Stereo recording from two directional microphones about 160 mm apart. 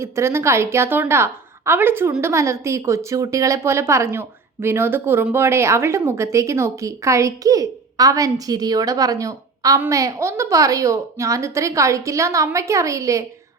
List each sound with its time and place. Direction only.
0.0 s a woman's voice: 15° right (ahead or behind)